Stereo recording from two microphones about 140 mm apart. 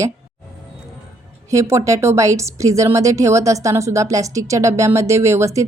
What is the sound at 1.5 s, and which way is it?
Speech, 20° right (ahead or behind).